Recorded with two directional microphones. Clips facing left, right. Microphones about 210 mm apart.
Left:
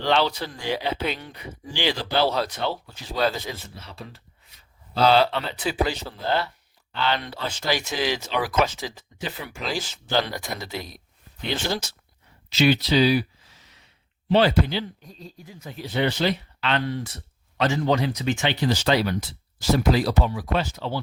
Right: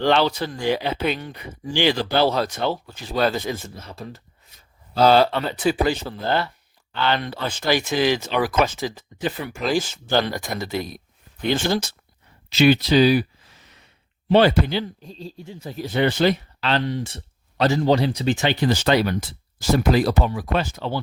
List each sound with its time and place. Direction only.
0.0 s speech: 50° right (ahead or behind)
12.5 s a sound: 50° right (ahead or behind)
14.3 s speech: 55° right (ahead or behind)
15.0 s speech: 30° right (ahead or behind)
15.8 s speech: 50° right (ahead or behind)
16.8 s speech: 25° right (ahead or behind)
18.6 s speech: 50° right (ahead or behind)